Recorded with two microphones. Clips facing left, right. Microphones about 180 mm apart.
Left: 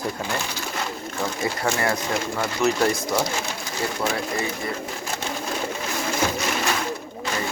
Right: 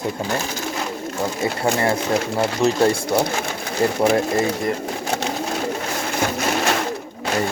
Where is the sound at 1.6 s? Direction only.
25° right (ahead or behind).